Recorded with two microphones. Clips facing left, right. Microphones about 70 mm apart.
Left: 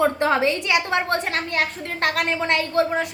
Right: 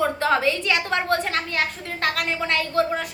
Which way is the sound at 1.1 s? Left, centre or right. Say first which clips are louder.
Even; left.